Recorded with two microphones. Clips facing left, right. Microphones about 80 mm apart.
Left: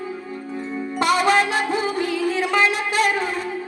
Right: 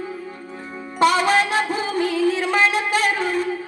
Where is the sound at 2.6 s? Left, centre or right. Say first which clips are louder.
Right 1 dB; left.